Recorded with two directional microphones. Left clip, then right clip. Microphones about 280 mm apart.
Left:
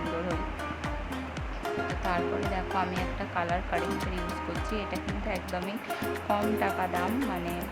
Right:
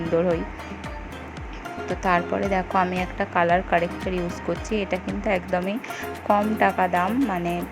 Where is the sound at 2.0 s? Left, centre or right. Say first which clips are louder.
Right 10 dB; right.